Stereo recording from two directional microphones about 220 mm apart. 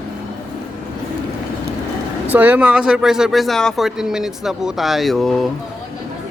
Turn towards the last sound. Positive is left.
turn(degrees=0)  # may be behind; listen again after turning